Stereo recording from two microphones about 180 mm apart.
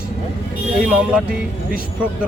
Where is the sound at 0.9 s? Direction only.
5° right (ahead or behind).